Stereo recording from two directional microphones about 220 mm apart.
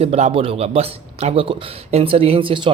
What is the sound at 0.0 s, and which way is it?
A man's voice, 25° right (ahead or behind).